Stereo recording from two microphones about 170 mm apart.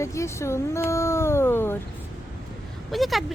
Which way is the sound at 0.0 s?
15° left (ahead or behind).